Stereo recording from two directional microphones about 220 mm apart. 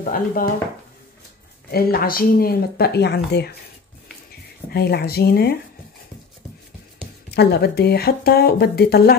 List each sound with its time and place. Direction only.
0.0 s speech: 40° left (ahead or behind)
1.7 s speech: 40° left (ahead or behind)
4.6 s speech: 45° left (ahead or behind)
7.2 s speech: 50° left (ahead or behind)